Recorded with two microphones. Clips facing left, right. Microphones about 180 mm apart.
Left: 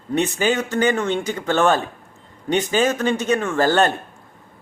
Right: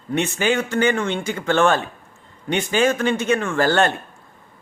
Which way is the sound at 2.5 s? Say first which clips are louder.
Even; 40° left (ahead or behind).